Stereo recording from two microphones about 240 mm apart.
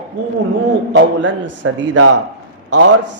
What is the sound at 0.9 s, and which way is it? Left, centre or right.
Speech, right.